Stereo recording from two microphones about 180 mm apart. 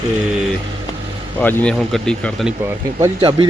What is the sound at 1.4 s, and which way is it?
Speech, 10° left (ahead or behind).